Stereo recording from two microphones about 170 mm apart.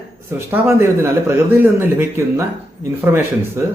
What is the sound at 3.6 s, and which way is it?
Speech, 15° right (ahead or behind).